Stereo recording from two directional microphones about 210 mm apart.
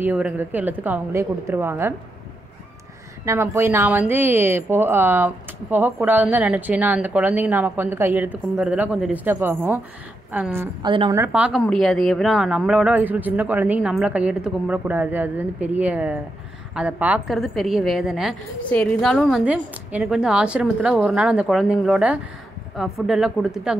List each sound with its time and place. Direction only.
0.0 s a woman's voice: 10° right (ahead or behind)
3.3 s a woman's voice: 10° right (ahead or behind)
10.9 s a woman's voice: 25° right (ahead or behind)
11.1 s a woman's voice: 5° right (ahead or behind)